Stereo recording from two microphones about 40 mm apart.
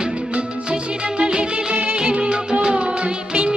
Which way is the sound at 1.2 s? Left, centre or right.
Right.